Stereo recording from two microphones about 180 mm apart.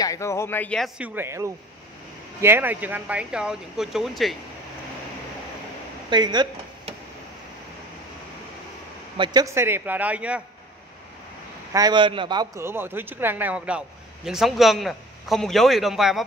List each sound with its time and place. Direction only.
0.0 s speech: 15° left (ahead or behind); by 4.4 s centre (ahead or behind)
6.0 s a sound: 25° right (ahead or behind)
9.1 s a man's voice: 25° right (ahead or behind); by 10.4 s 5° right (ahead or behind)
11.7 s a man's voice: 25° right (ahead or behind); by 16.3 s centre (ahead or behind)